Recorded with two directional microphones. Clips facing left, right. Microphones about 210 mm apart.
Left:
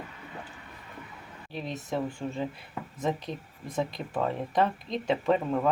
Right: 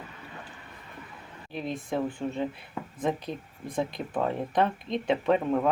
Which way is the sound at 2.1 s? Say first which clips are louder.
Right 2 dB; 5° right (ahead or behind).